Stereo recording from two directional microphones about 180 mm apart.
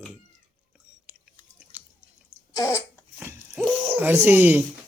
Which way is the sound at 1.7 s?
10° right (ahead or behind).